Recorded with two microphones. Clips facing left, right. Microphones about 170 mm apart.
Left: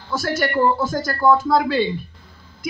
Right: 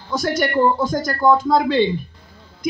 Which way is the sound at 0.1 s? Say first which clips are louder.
Right 2 dB; 15° right (ahead or behind).